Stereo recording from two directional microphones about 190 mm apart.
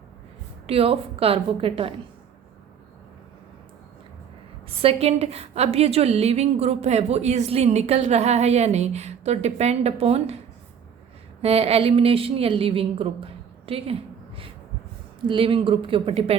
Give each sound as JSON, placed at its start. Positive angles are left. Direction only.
{"t": 0.7, "sound": "a woman's voice", "side_deg": -30}
{"t": 4.8, "sound": "a woman's voice", "side_deg": -30}
{"t": 11.4, "sound": "a woman's voice", "side_deg": -30}